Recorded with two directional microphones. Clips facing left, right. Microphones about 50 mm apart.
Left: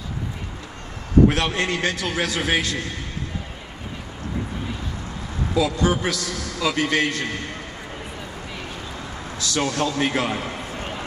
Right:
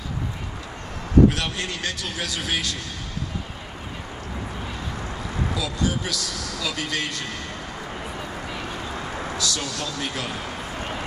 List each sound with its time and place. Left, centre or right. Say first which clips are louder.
1.3 s a man's voice: left 6 dB; left
5.5 s a man's voice: left 8 dB; left
9.4 s a man's voice: left 10 dB; left